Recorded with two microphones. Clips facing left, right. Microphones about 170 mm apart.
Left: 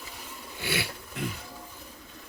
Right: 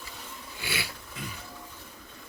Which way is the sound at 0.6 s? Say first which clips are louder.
Left 5 dB; 55° left (ahead or behind).